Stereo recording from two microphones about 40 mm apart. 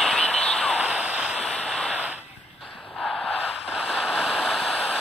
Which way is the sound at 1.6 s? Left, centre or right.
Centre.